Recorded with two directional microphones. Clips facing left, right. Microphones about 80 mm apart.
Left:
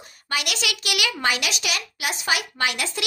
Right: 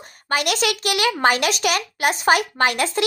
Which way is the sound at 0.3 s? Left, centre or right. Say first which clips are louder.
Right 7 dB; right.